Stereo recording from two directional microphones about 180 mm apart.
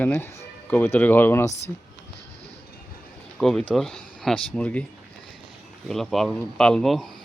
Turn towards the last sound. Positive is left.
turn(degrees=0)  # may be behind; listen again after turning